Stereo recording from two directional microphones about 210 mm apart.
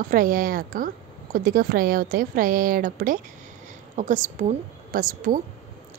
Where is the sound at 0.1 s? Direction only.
40° right (ahead or behind).